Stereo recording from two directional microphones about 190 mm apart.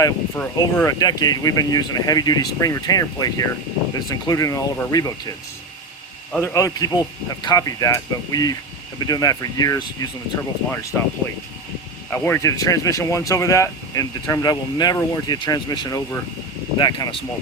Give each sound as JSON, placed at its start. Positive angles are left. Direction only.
{"t": 0.0, "sound": "speech", "side_deg": 15}
{"t": 6.3, "sound": "speech", "side_deg": 15}
{"t": 12.1, "sound": "speech", "side_deg": 10}